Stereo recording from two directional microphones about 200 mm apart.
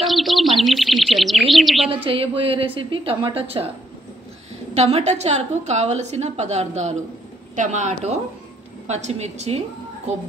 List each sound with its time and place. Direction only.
0.0 s bird: centre (ahead or behind)
2.0 s a woman's voice: 25° right (ahead or behind)
4.7 s a woman's voice: 30° right (ahead or behind)